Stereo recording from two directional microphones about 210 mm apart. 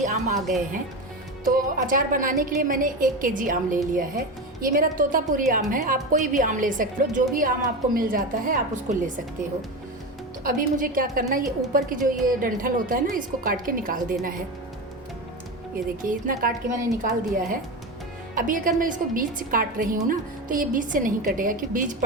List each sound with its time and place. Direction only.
0.0 s speech: 35° right (ahead or behind)
1.5 s a woman's voice: 40° right (ahead or behind)
10.4 s a woman's voice: 40° right (ahead or behind)
16.0 s a woman's voice: 40° right (ahead or behind)